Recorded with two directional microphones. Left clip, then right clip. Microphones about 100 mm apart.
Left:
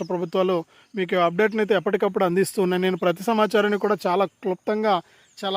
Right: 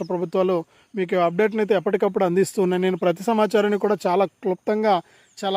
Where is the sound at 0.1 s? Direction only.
10° right (ahead or behind).